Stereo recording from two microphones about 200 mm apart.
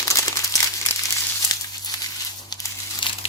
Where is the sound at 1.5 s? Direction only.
20° left (ahead or behind).